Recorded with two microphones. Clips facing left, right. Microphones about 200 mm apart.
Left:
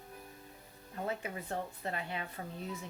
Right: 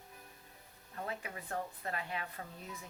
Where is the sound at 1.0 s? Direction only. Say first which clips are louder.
Left 4 dB; 25° left (ahead or behind).